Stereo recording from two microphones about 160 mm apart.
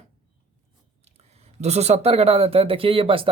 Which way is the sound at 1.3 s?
40° right (ahead or behind).